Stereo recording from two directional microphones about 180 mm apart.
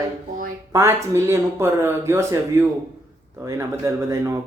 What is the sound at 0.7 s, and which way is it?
Speech, 15° right (ahead or behind).